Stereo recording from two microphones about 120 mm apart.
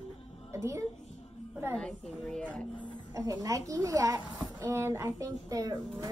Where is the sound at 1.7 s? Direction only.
5° left (ahead or behind).